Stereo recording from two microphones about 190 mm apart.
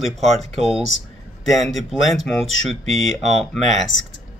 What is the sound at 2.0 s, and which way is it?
Speech, 90° left.